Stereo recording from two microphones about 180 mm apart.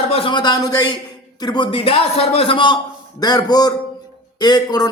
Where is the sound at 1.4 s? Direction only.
25° left (ahead or behind).